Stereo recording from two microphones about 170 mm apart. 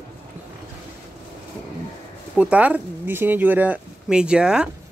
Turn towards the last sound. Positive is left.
turn(degrees=-5)  # may be behind; listen again after turning